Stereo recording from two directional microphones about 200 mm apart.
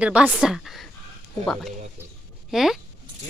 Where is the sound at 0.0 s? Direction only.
5° right (ahead or behind).